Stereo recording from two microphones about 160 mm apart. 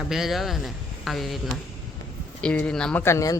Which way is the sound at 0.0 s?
Centre (ahead or behind).